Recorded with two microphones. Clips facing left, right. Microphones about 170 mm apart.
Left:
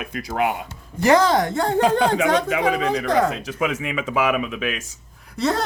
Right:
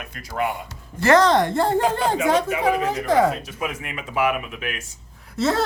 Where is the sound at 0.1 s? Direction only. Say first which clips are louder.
Left 3 dB; 80° left.